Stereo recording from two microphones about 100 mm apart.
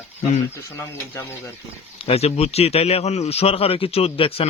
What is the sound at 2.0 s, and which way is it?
A man's voice, 80° left.